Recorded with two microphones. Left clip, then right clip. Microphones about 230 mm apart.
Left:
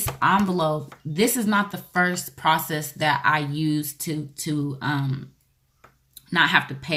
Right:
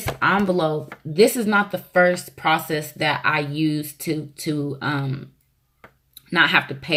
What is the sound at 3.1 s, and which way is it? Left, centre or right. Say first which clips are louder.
Speech: left 1 dB; centre.